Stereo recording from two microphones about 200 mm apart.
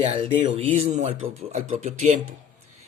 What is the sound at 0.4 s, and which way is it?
Speech, 30° right (ahead or behind).